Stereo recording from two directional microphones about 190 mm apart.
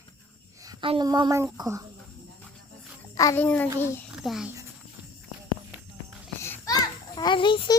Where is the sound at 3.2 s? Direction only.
15° left (ahead or behind).